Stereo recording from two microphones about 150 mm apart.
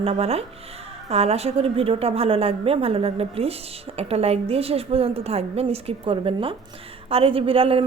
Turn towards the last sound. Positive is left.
turn(degrees=-40)  # may be behind; listen again after turning